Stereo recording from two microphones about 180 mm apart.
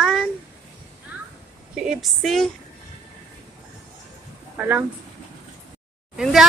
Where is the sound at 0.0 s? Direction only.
Centre (ahead or behind).